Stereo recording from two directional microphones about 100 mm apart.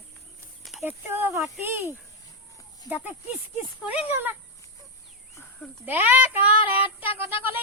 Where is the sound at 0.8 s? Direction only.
20° right (ahead or behind).